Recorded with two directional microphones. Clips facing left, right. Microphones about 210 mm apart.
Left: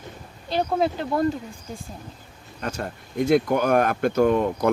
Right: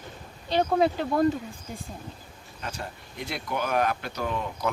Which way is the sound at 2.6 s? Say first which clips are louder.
Left 7 dB; 45° left (ahead or behind).